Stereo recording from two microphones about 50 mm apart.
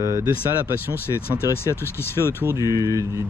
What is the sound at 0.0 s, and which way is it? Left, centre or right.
Speech, right.